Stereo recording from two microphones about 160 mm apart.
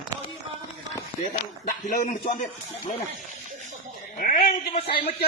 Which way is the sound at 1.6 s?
55° left (ahead or behind).